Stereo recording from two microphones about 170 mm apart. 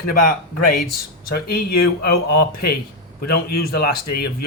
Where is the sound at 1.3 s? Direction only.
60° left (ahead or behind).